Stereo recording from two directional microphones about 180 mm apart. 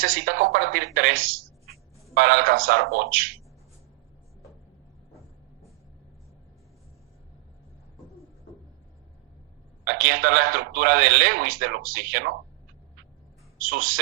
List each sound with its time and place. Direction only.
0.0 s a woman's voice: 50° right (ahead or behind)
9.8 s a man's voice: 55° right (ahead or behind)
13.6 s a woman's voice: 50° right (ahead or behind)